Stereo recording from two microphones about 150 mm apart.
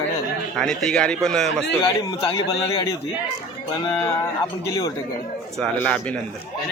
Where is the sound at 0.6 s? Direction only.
5° left (ahead or behind).